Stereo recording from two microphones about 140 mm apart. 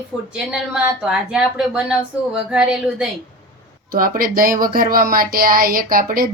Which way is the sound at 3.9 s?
90° right.